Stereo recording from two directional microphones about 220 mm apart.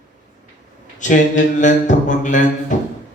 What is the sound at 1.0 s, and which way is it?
Speech, 35° left (ahead or behind).